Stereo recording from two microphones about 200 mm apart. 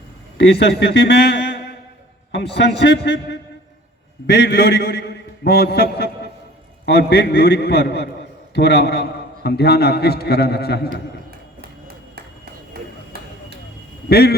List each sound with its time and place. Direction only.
0.3 s a man's voice: 55° left (ahead or behind)
12.7 s a sound: 50° right (ahead or behind)
14.1 s a man's voice: 50° left (ahead or behind)